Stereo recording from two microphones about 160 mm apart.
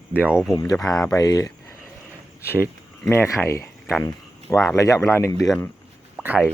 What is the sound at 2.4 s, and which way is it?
Speech, 15° right (ahead or behind).